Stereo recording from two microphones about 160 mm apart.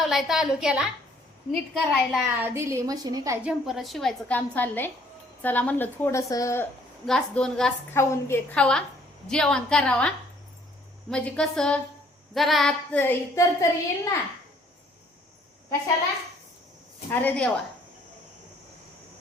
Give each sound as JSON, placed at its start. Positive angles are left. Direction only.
{"t": 0.0, "sound": "a woman's voice", "side_deg": 0}
{"t": 2.4, "sound": "a woman's voice", "side_deg": -15}
{"t": 3.4, "sound": "a woman's voice", "side_deg": 0}
{"t": 7.0, "sound": "a woman's voice", "side_deg": 5}
{"t": 17.1, "sound": "a woman's voice", "side_deg": 10}